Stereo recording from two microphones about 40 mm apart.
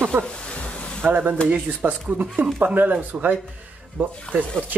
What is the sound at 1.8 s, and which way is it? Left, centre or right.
Speech, right.